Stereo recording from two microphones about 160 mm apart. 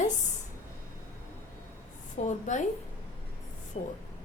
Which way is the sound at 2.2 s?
50° left (ahead or behind).